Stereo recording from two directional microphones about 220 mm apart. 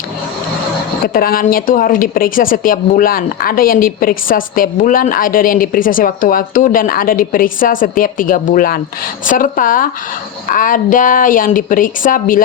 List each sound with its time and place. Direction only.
1.0 s a woman's voice: 40° left (ahead or behind)